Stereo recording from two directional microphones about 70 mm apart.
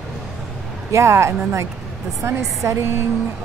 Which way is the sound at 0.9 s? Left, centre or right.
Right.